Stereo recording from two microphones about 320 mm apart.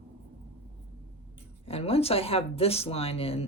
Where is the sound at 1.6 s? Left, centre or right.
Centre.